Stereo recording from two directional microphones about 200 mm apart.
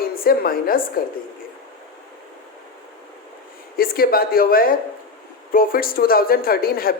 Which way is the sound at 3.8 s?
50° left (ahead or behind).